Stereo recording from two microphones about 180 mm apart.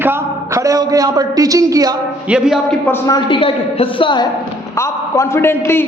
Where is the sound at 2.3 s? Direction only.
5° right (ahead or behind).